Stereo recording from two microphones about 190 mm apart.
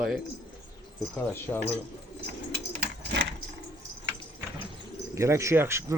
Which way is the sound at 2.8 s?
65° right (ahead or behind).